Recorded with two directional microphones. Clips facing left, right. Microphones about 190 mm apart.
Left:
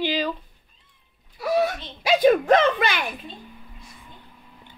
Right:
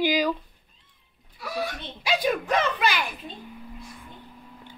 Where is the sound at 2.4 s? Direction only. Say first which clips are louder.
Left 6 dB; 55° left (ahead or behind).